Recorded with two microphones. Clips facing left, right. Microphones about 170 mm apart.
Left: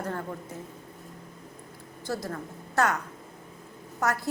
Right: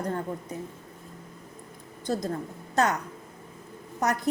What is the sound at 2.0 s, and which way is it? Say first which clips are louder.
Speech: right 4 dB; 20° right (ahead or behind).